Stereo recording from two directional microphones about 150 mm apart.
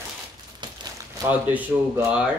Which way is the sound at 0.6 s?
30° right (ahead or behind).